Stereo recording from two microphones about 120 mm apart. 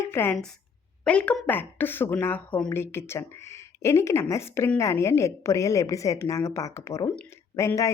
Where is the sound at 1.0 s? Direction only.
10° left (ahead or behind).